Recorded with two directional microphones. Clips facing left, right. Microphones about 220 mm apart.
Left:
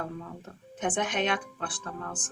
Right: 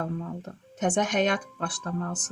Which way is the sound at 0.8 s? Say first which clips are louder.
Right 4 dB; 45° right (ahead or behind).